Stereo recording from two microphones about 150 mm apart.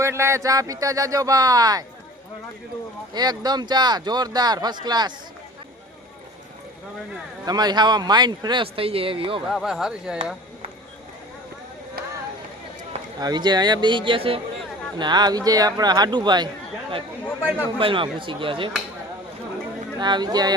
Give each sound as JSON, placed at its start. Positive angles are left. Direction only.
{"t": 0.0, "sound": "speech", "side_deg": -20}
{"t": 3.2, "sound": "speech", "side_deg": -25}
{"t": 7.4, "sound": "speech", "side_deg": -25}
{"t": 9.5, "sound": "speech", "side_deg": 0}
{"t": 13.1, "sound": "speech", "side_deg": -25}
{"t": 17.7, "sound": "speech", "side_deg": -35}
{"t": 20.0, "sound": "speech", "side_deg": -30}